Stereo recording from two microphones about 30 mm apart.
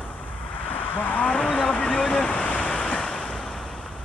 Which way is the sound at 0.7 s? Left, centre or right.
Left.